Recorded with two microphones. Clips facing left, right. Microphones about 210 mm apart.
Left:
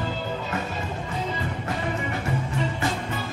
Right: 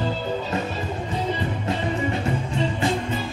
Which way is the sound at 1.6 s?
25° right (ahead or behind).